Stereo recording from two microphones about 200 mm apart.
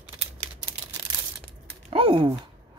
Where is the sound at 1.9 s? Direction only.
25° right (ahead or behind).